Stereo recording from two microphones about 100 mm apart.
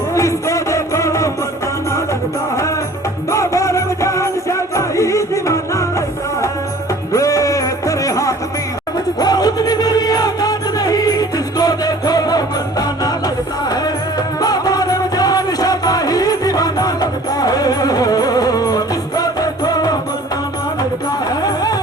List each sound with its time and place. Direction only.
0.1 s music: 30° left (ahead or behind)
3.3 s music: 30° left (ahead or behind)
7.1 s music: 35° left (ahead or behind)
21.2 s music: 40° left (ahead or behind)